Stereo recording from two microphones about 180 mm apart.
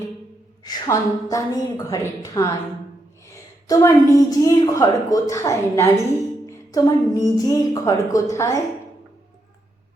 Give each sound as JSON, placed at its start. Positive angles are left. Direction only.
{"t": 0.6, "sound": "a woman's voice", "side_deg": 20}
{"t": 3.7, "sound": "a woman's voice", "side_deg": 20}